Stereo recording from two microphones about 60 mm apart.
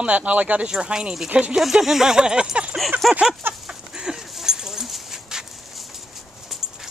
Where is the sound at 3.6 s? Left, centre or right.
Centre.